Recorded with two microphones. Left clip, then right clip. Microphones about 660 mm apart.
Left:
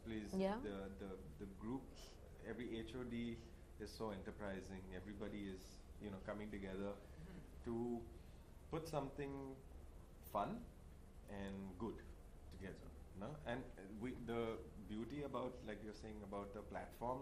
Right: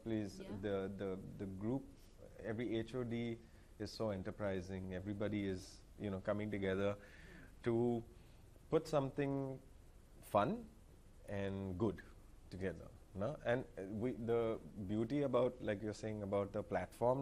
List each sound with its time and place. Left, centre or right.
0.3 s speech: left
0.6 s speech: right
8.7 s speech: right
13.1 s speech: right